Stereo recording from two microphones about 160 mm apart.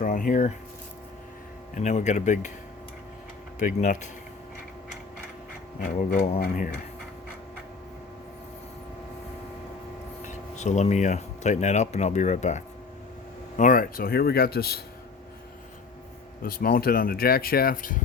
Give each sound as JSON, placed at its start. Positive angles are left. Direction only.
{"t": 0.0, "sound": "speech", "side_deg": 55}
{"t": 1.7, "sound": "speech", "side_deg": 50}
{"t": 3.6, "sound": "speech", "side_deg": 50}
{"t": 5.8, "sound": "speech", "side_deg": 60}
{"t": 10.2, "sound": "speech", "side_deg": 45}
{"t": 13.6, "sound": "speech", "side_deg": 60}
{"t": 16.4, "sound": "speech", "side_deg": 65}